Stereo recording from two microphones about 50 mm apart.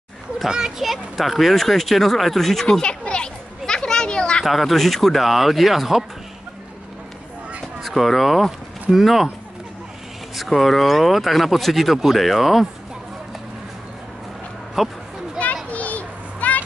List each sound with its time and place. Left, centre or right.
0.4 s a child's voice: centre
4.5 s speech: centre
7.8 s speech: centre
10.3 s speech: centre
14.8 s speech: centre
15.7 s children playing: left